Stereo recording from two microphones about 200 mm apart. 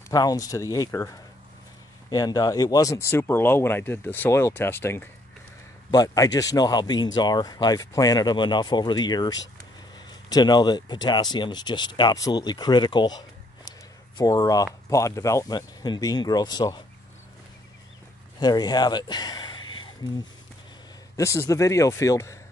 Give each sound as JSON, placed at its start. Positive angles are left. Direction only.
{"t": 0.1, "sound": "speech", "side_deg": 20}
{"t": 18.4, "sound": "speech", "side_deg": 20}
{"t": 21.2, "sound": "speech", "side_deg": 15}